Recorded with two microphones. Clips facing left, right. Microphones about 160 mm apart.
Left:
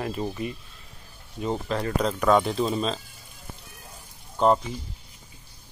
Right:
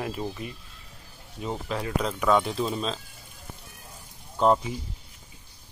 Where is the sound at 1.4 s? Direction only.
5° right (ahead or behind).